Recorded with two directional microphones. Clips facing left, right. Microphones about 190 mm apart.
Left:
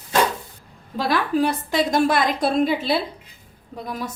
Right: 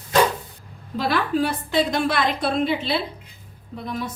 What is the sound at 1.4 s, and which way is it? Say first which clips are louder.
A woman's voice: left 1 dB; 45° left (ahead or behind).